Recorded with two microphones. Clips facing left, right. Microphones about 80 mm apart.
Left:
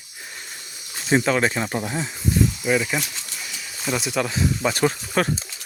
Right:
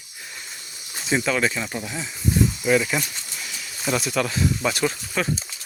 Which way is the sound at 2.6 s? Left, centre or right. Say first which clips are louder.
Right 1 dB; centre.